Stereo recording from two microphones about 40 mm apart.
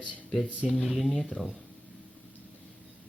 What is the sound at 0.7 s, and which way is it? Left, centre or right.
Speech, centre.